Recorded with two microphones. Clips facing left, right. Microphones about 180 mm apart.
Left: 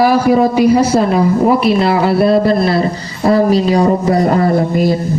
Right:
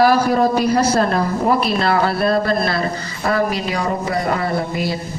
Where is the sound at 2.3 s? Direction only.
25° left (ahead or behind); by 4.9 s 45° left (ahead or behind).